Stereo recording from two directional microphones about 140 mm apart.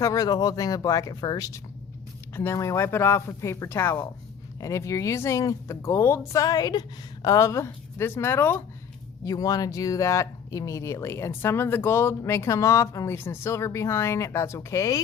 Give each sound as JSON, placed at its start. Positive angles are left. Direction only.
{"t": 0.0, "sound": "speech", "side_deg": 25}